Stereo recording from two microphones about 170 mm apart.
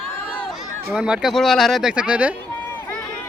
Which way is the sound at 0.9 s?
5° right (ahead or behind).